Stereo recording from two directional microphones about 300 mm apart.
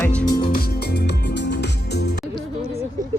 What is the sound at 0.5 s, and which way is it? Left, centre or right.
Music, left.